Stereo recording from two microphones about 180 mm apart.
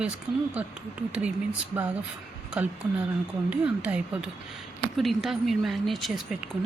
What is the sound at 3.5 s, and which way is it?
Speech, 5° right (ahead or behind).